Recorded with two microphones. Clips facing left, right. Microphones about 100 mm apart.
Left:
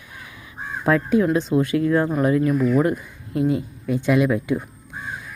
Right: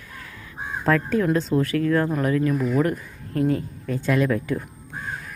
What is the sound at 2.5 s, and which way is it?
Speech, centre (ahead or behind).